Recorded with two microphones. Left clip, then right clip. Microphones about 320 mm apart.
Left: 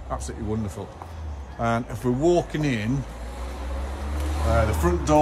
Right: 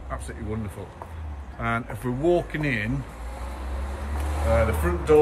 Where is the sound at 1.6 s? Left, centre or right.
Centre.